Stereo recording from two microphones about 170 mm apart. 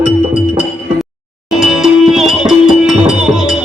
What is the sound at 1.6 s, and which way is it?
Music, centre (ahead or behind).